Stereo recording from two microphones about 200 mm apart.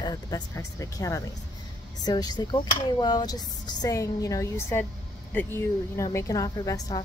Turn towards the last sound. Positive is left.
turn(degrees=20)  # may be behind; listen again after turning